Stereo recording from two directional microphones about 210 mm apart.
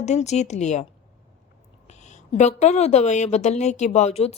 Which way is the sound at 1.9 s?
35° left (ahead or behind).